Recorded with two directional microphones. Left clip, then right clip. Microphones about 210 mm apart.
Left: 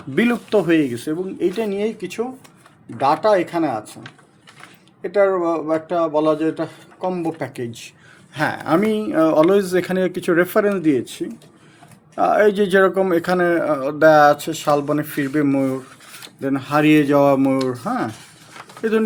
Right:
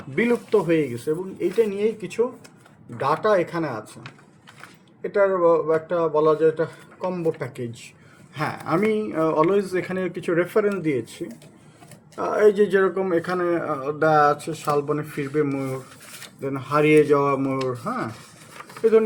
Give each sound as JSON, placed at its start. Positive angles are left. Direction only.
{"t": 0.2, "sound": "a man's voice", "side_deg": 55}
{"t": 5.0, "sound": "a man's voice", "side_deg": 55}